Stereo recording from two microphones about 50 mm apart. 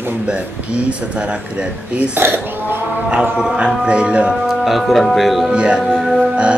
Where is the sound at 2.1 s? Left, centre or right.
Right.